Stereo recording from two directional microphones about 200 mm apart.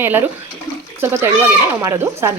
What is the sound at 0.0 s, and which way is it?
Speech, 10° right (ahead or behind).